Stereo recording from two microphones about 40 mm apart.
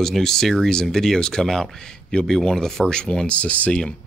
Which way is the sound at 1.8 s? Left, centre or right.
Centre.